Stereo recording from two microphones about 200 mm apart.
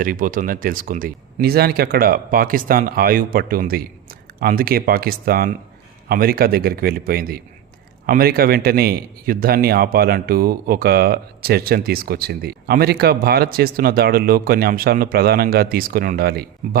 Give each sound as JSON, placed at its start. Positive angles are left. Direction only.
{"t": 0.0, "sound": "speech", "side_deg": -45}